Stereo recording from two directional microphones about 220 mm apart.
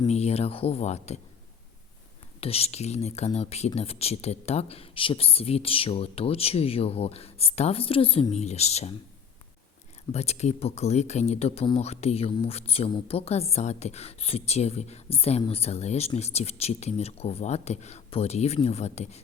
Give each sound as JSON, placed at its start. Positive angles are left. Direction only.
{"t": 0.1, "sound": "speech", "side_deg": 30}
{"t": 2.4, "sound": "speech", "side_deg": 25}
{"t": 10.1, "sound": "speech", "side_deg": 30}